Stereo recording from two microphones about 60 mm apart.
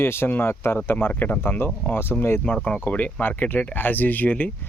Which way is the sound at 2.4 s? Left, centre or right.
Left.